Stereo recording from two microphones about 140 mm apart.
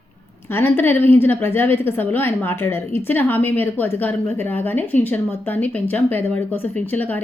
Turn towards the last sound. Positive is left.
turn(degrees=10)  # may be behind; listen again after turning